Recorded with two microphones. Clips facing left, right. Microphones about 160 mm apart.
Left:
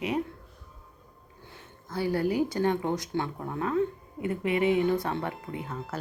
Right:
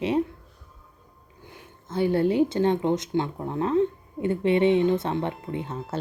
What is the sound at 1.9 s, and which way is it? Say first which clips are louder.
Speech: right 5 dB; 25° right (ahead or behind).